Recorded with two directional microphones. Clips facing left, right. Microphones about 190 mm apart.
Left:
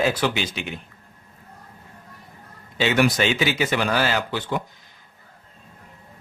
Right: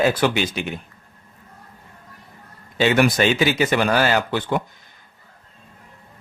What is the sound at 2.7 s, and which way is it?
Speech, 50° right (ahead or behind).